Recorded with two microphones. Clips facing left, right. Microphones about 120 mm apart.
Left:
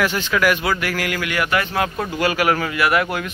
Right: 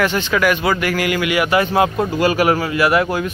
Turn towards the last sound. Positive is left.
turn(degrees=-25)  # may be behind; listen again after turning